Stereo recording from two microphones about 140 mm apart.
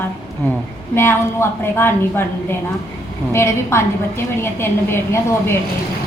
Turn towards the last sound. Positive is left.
turn(degrees=15)  # may be behind; listen again after turning